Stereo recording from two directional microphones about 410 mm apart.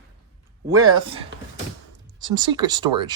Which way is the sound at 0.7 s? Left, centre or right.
Right.